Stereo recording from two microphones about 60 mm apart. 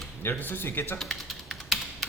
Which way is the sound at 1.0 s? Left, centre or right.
Centre.